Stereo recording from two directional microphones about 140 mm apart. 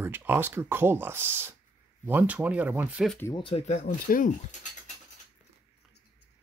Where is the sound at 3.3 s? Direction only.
40° left (ahead or behind); by 4.3 s 65° left (ahead or behind).